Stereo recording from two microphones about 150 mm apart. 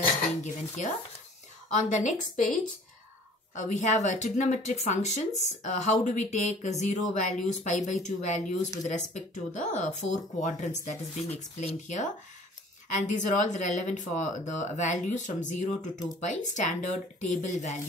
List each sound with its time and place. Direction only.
0.4 s speech: 55° left (ahead or behind)
3.5 s speech: 55° left (ahead or behind)